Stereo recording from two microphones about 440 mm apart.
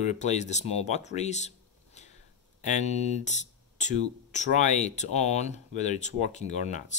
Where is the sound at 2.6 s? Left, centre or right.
Centre.